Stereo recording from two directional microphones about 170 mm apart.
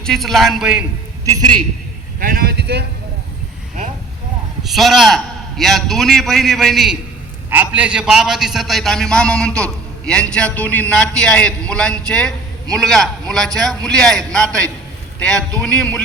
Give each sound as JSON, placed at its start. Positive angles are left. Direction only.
{"t": 0.0, "sound": "a man's voice", "side_deg": 0}
{"t": 2.1, "sound": "speech", "side_deg": -60}
{"t": 4.6, "sound": "a man's voice", "side_deg": 0}
{"t": 7.5, "sound": "a man's voice", "side_deg": -10}